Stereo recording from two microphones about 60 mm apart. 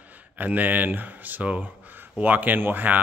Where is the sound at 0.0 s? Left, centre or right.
Right.